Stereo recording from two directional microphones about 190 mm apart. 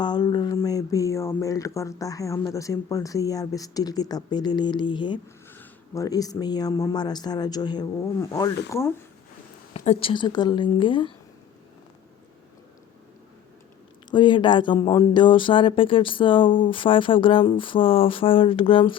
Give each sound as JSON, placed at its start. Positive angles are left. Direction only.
{"t": 0.0, "sound": "speech", "side_deg": 20}
{"t": 5.5, "sound": "speech", "side_deg": 15}
{"t": 9.7, "sound": "speech", "side_deg": 30}
{"t": 14.1, "sound": "speech", "side_deg": 25}